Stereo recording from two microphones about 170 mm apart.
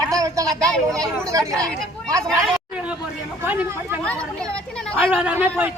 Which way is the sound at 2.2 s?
Centre (ahead or behind).